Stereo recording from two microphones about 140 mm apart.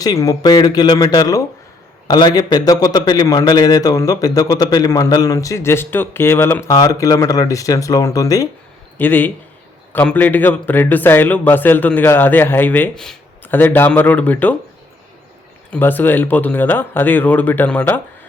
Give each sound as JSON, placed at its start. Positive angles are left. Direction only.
{"t": 0.0, "sound": "a man's voice", "side_deg": 25}
{"t": 9.0, "sound": "a man's voice", "side_deg": 15}
{"t": 15.7, "sound": "a man's voice", "side_deg": 15}